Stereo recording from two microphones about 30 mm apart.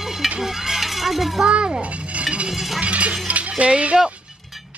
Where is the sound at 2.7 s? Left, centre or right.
Right.